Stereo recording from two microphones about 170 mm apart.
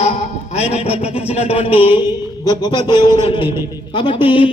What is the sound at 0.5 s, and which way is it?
Speech, 40° left (ahead or behind).